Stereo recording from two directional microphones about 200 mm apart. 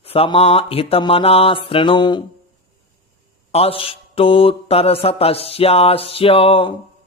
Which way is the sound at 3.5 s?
30° left (ahead or behind).